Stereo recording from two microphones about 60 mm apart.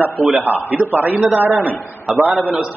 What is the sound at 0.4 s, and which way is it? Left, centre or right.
A man's voice, right.